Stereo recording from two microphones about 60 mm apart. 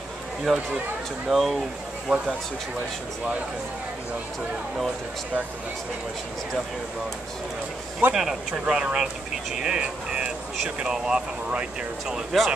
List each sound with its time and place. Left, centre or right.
0.5 s speech: centre
2.0 s speech: centre
8.1 s speech: centre
12.3 s speech: centre